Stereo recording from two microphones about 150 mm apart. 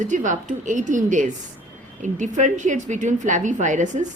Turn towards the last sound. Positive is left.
turn(degrees=-55)  # may be behind; listen again after turning